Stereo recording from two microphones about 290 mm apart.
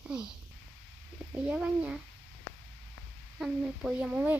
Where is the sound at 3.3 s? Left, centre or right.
Centre.